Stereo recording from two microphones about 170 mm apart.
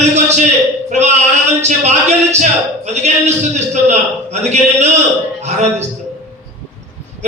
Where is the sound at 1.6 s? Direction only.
40° right (ahead or behind).